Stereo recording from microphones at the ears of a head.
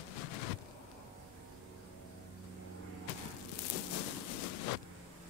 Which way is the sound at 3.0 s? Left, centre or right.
Left.